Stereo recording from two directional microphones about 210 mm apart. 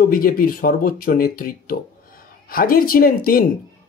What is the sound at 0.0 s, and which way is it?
Speech, 45° left (ahead or behind).